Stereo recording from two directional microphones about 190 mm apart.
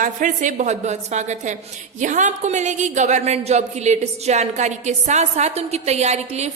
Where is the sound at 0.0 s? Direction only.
40° right (ahead or behind).